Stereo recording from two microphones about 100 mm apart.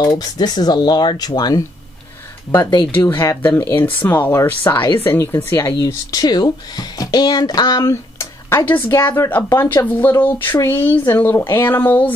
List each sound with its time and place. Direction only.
0.0 s speech: 40° left (ahead or behind)
3.1 s speech: 25° left (ahead or behind)